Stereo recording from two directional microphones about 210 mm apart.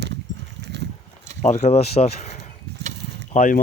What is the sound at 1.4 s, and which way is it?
Speech, 35° left (ahead or behind).